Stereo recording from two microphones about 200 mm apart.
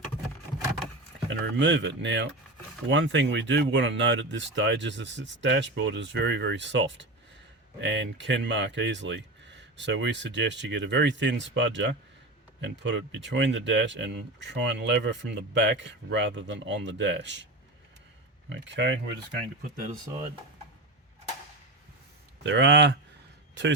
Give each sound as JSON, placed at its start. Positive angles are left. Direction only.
{"t": 1.3, "sound": "speech", "side_deg": -65}
{"t": 18.4, "sound": "speech", "side_deg": -65}
{"t": 22.4, "sound": "speech", "side_deg": -65}